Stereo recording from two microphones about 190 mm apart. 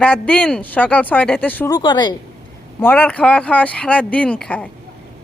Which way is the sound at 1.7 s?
20° left (ahead or behind).